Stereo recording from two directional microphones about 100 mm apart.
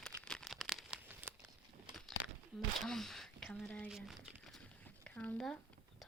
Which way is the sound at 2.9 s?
5° left (ahead or behind).